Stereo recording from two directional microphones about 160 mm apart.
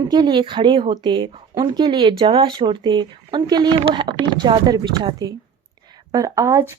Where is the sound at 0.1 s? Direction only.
30° right (ahead or behind).